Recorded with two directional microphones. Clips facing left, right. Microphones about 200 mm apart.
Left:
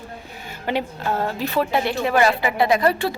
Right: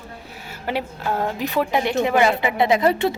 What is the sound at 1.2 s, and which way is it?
Speech, 15° right (ahead or behind).